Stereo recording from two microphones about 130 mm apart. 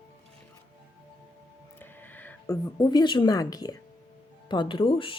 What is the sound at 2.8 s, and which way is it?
A woman's voice, 30° left (ahead or behind).